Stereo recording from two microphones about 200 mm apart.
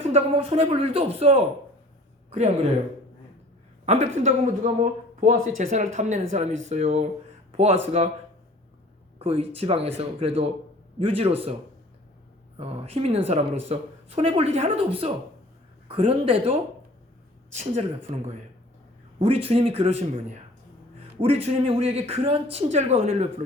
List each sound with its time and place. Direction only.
0.1 s speech: 30° right (ahead or behind)
3.8 s speech: 35° right (ahead or behind)
9.1 s speech: 30° right (ahead or behind)
12.5 s speech: 30° right (ahead or behind)